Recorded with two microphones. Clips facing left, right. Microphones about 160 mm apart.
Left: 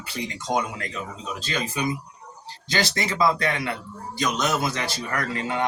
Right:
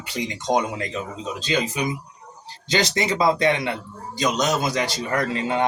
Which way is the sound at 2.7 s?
20° right (ahead or behind).